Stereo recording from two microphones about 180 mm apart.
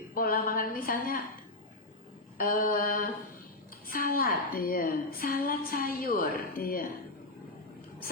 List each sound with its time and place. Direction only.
0.1 s a woman's voice: 55° left (ahead or behind)
2.4 s a woman's voice: 50° left (ahead or behind)